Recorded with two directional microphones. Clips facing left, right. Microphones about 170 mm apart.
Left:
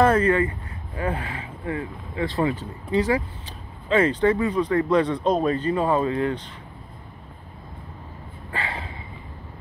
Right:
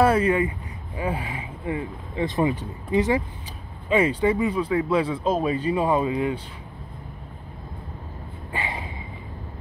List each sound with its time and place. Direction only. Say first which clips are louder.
0.0 s speech: left 1 dB; 10° right (ahead or behind)
3.9 s speech: left 1 dB; 10° right (ahead or behind)
8.5 s a sound: even; 15° right (ahead or behind)